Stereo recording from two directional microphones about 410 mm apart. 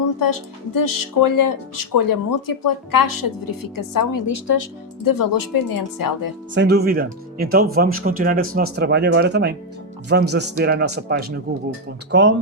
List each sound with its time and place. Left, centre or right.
0.2 s speech: left
6.5 s speech: right